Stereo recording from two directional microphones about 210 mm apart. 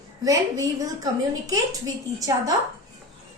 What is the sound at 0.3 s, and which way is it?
A woman's voice, 15° right (ahead or behind).